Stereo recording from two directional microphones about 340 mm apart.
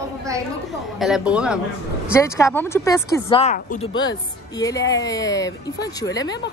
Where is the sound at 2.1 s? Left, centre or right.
Centre.